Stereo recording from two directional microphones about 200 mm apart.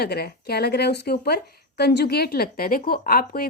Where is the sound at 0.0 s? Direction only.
50° left (ahead or behind).